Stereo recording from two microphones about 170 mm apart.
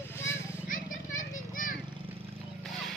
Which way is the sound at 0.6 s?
50° left (ahead or behind).